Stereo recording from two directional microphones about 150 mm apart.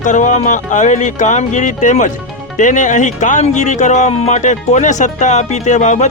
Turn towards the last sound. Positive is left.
turn(degrees=50)  # may be behind; listen again after turning